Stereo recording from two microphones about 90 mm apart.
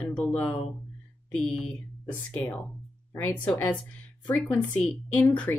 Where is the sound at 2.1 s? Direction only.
20° left (ahead or behind).